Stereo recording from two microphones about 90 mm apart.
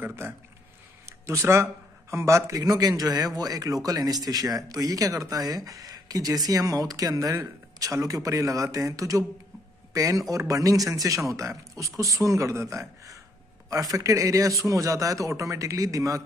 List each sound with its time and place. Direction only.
0.0 s speech: 25° right (ahead or behind)